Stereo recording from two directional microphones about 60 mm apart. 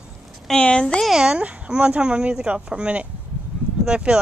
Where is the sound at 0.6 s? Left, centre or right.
Centre.